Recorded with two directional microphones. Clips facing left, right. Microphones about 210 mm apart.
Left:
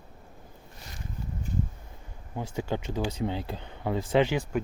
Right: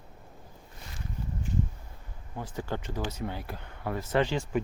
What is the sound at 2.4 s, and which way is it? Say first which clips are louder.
Speech: left 3 dB; 15° left (ahead or behind).